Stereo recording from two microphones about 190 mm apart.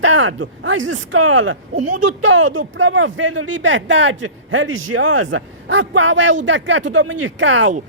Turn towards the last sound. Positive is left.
turn(degrees=-90)